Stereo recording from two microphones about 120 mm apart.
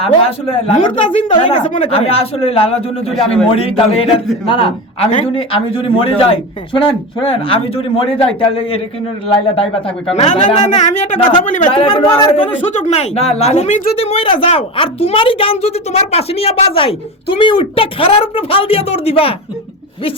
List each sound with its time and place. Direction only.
0.0 s a woman's voice: 50° left (ahead or behind); by 11.2 s 70° left (ahead or behind)
11.7 s speech: 45° left (ahead or behind)
12.5 s speech: 80° left
14.0 s a woman's voice: 50° left (ahead or behind)